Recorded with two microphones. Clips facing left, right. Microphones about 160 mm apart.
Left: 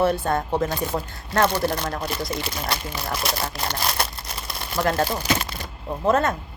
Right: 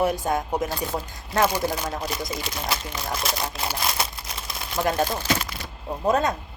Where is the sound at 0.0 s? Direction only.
15° right (ahead or behind).